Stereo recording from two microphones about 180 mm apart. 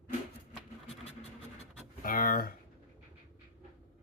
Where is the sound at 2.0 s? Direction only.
50° left (ahead or behind).